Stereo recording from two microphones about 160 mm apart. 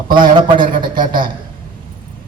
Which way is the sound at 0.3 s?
30° right (ahead or behind).